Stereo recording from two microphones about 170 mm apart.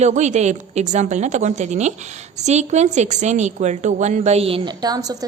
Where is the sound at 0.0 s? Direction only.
45° right (ahead or behind).